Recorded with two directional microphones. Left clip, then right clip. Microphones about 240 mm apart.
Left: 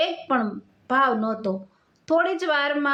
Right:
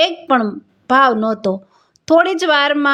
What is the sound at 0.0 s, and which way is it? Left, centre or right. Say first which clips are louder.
Speech: right 9 dB; right.